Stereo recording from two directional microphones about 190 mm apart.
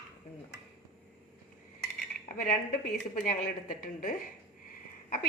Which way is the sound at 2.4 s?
45° left (ahead or behind).